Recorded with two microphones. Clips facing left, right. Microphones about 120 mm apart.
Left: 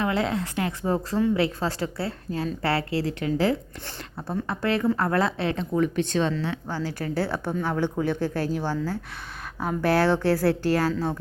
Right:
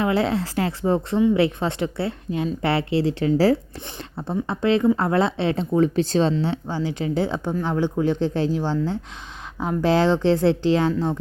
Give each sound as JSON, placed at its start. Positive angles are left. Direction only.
{"t": 0.0, "sound": "a woman's voice", "side_deg": -30}
{"t": 4.3, "sound": "a woman's voice", "side_deg": -25}
{"t": 6.7, "sound": "a woman's voice", "side_deg": -15}